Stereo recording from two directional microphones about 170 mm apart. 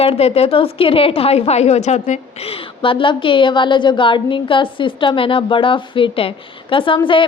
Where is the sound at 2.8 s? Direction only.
30° left (ahead or behind).